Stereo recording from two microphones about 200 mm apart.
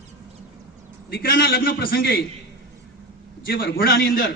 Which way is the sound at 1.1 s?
50° left (ahead or behind).